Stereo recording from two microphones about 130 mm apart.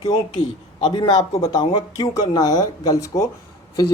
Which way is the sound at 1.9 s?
30° left (ahead or behind).